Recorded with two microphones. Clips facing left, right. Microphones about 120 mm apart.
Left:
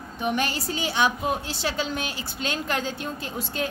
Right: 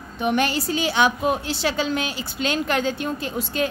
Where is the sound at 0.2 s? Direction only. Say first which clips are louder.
Right 5 dB; 70° right (ahead or behind).